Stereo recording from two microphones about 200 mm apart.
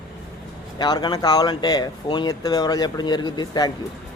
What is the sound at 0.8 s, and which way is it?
Speech, 20° left (ahead or behind).